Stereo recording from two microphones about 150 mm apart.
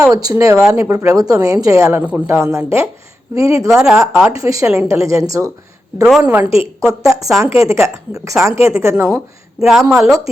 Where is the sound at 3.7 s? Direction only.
5° right (ahead or behind).